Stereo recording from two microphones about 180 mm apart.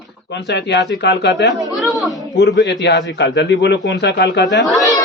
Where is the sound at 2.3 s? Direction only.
70° left (ahead or behind).